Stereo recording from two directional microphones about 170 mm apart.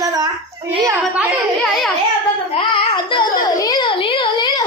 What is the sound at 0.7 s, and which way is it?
Speech, 20° right (ahead or behind).